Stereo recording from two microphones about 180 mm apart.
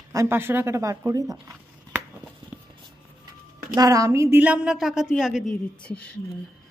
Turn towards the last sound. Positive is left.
turn(degrees=5)  # may be behind; listen again after turning